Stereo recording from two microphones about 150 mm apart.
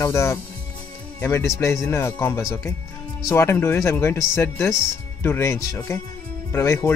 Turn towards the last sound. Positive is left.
turn(degrees=15)  # may be behind; listen again after turning